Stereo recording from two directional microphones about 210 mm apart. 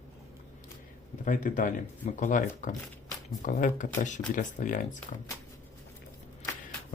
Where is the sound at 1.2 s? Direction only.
40° left (ahead or behind).